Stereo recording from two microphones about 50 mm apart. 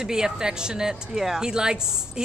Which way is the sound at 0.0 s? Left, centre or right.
Centre.